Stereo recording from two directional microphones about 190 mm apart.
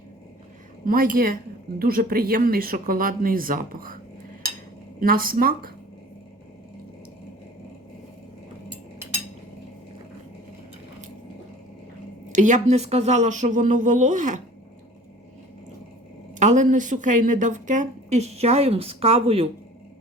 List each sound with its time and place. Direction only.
0.9 s speech: 45° right (ahead or behind)
4.9 s speech: 50° right (ahead or behind)
12.3 s a woman's voice: 40° right (ahead or behind)
16.4 s a woman's voice: 40° right (ahead or behind)